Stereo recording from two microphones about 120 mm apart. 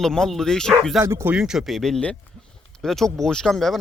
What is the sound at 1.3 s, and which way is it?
Speech, 5° right (ahead or behind).